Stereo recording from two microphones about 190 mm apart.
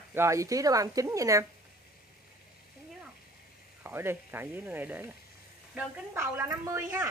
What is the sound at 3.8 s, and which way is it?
Speech, 10° right (ahead or behind).